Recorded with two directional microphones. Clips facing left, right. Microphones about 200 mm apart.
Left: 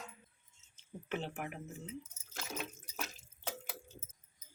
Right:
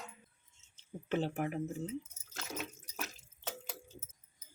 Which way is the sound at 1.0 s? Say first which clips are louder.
Right 6 dB; 35° right (ahead or behind).